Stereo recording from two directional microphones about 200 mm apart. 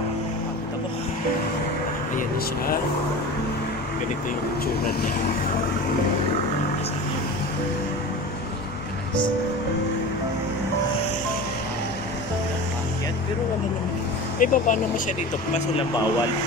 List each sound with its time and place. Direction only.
2.1 s speech: 45° left (ahead or behind)
14.4 s speech: 40° left (ahead or behind)